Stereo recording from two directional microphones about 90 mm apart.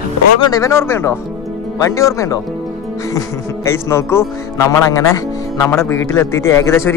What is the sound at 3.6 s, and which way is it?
Speech, 30° left (ahead or behind).